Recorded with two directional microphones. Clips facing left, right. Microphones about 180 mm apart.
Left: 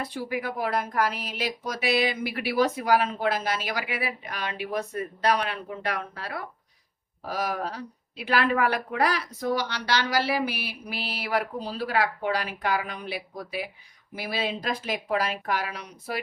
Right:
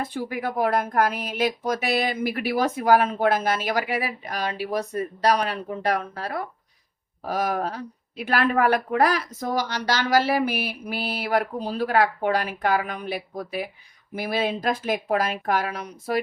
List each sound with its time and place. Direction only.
0.0 s speech: 50° right (ahead or behind)